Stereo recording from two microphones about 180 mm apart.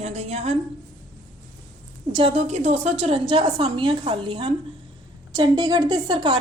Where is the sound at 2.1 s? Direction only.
30° right (ahead or behind).